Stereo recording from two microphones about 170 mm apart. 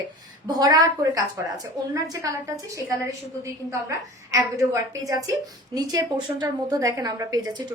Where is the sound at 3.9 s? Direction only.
20° right (ahead or behind).